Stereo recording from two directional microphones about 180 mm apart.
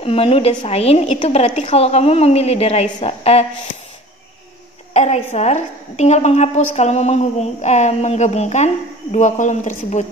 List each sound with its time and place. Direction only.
0.0 s a woman's voice: 30° left (ahead or behind)
4.9 s a woman's voice: 40° left (ahead or behind)